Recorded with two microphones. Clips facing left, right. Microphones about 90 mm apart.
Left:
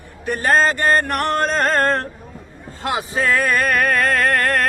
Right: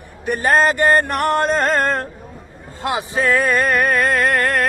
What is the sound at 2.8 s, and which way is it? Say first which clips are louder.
Male singing: right 1 dB; 20° right (ahead or behind).